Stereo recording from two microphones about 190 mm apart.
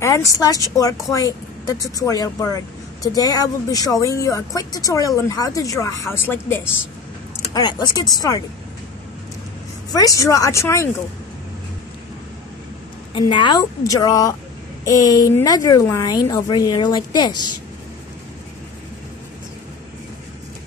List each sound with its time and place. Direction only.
0.0 s speech: 15° left (ahead or behind)
9.9 s speech: 15° left (ahead or behind)
13.1 s speech: 25° left (ahead or behind)